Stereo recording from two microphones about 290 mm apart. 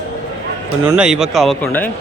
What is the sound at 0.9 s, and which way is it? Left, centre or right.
Speech, centre.